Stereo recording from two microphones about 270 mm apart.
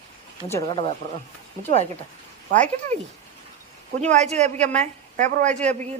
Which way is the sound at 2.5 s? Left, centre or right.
Right.